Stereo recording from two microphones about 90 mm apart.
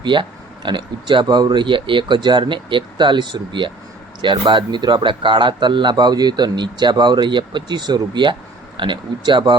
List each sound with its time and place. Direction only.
0.0 s speech: 60° right (ahead or behind)